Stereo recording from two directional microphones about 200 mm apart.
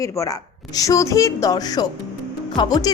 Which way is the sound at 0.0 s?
15° left (ahead or behind).